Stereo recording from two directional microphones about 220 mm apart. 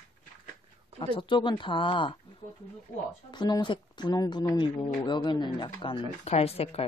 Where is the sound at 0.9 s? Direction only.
25° left (ahead or behind).